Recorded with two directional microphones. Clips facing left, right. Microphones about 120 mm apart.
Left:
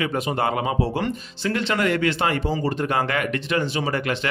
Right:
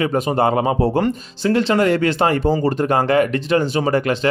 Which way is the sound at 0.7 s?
45° right (ahead or behind).